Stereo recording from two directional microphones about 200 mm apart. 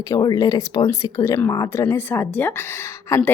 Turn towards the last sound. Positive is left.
turn(degrees=15)  # may be behind; listen again after turning